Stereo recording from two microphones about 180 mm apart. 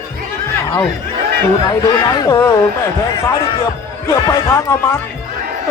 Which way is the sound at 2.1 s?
15° left (ahead or behind).